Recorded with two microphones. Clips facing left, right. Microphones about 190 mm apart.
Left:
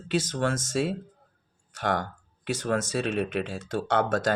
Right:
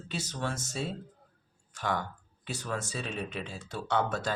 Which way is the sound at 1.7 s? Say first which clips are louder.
Left 5 dB; 75° left (ahead or behind).